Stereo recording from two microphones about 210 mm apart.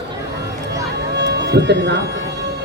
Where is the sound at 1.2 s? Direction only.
55° right (ahead or behind).